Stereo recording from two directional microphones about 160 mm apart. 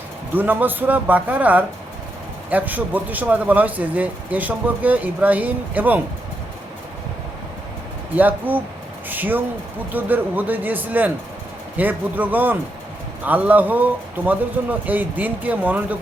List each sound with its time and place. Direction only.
0.3 s speech: 10° right (ahead or behind)
8.1 s speech: 10° right (ahead or behind)